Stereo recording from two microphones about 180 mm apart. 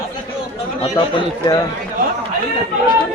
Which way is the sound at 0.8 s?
30° left (ahead or behind).